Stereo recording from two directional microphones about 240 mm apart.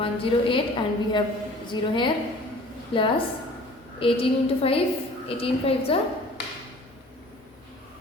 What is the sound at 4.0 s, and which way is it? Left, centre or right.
A woman's voice, left.